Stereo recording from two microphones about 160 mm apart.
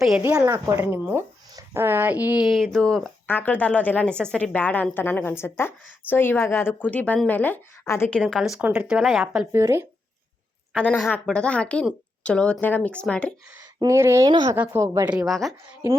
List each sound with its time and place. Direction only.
0.2 s a woman's voice: 15° right (ahead or behind)
9.5 s a woman's voice: 15° right (ahead or behind)
10.8 s speech: 5° left (ahead or behind)
13.7 s speech: 20° right (ahead or behind)
14.5 s a woman's voice: 15° right (ahead or behind)
15.1 s a woman's voice: centre (ahead or behind)